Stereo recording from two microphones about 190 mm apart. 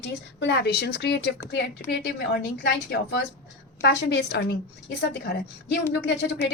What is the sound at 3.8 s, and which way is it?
Speech, 60° left (ahead or behind).